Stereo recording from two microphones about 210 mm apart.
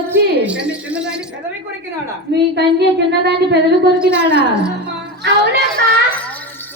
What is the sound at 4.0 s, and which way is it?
Speech, 5° right (ahead or behind).